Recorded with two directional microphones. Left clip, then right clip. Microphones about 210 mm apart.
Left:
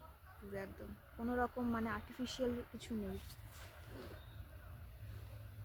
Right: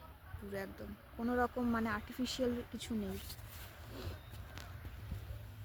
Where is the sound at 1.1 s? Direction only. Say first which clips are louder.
Right 4 dB; 25° right (ahead or behind).